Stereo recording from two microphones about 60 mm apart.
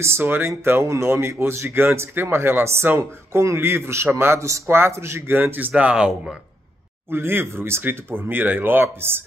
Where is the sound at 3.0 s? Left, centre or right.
Right.